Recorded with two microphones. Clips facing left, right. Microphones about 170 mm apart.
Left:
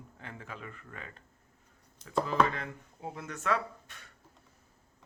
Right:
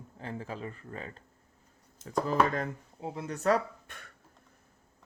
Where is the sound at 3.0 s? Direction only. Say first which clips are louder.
Right 7 dB; 25° right (ahead or behind); by 4.0 s 45° right (ahead or behind).